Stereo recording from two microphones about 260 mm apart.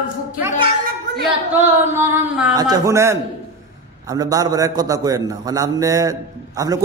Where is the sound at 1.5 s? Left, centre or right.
Centre.